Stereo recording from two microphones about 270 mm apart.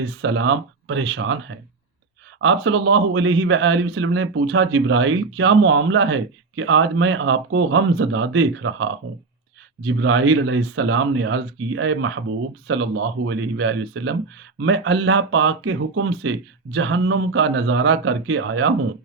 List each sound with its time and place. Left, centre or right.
0.2 s a man's voice: right